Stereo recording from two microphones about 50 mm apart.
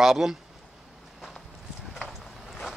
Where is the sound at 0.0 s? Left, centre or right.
Centre.